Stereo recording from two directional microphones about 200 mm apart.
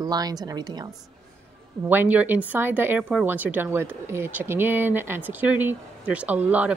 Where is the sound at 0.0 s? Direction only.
20° right (ahead or behind).